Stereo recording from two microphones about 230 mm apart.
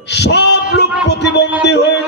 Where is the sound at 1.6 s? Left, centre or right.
Left.